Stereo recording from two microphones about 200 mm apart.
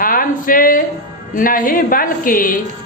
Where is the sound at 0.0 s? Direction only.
45° left (ahead or behind).